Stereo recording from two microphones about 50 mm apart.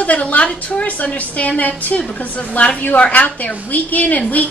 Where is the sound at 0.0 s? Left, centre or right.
Left.